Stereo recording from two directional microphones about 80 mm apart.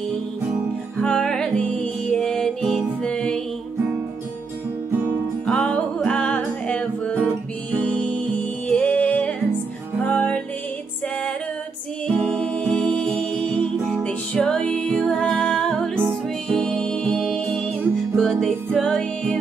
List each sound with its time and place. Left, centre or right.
1.0 s music: centre
5.5 s music: centre
12.1 s music: centre